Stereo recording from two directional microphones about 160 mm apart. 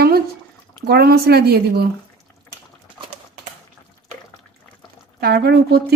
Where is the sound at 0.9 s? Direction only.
80° right.